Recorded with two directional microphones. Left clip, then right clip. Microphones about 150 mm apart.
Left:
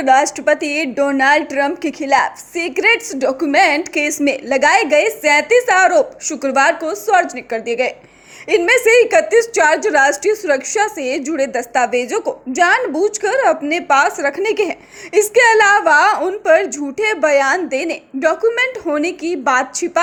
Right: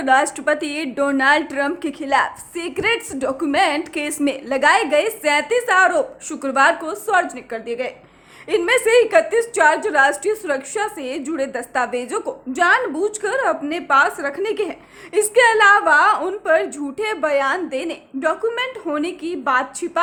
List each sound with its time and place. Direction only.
0.0 s a woman's voice: 15° left (ahead or behind)
12.9 s speech: 10° right (ahead or behind)
13.2 s a woman's voice: 20° left (ahead or behind)